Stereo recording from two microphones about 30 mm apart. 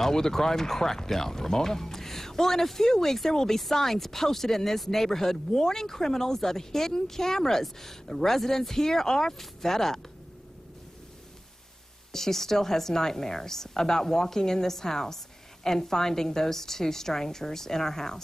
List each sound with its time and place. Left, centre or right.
0.0 s speech: centre
12.1 s speech: centre